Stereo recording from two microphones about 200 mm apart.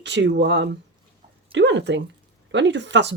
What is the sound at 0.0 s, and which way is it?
Speech, 65° right (ahead or behind).